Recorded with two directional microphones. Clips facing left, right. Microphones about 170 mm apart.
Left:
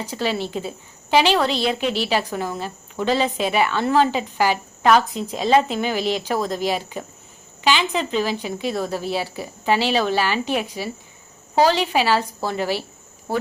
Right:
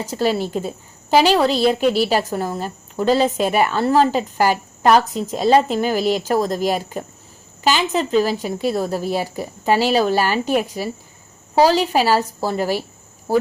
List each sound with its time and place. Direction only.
0.0 s a woman's voice: 45° right (ahead or behind)